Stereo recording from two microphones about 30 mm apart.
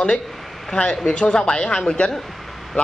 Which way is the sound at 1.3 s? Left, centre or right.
Left.